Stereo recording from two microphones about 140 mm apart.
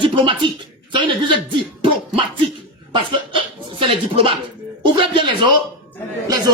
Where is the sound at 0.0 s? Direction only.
35° right (ahead or behind).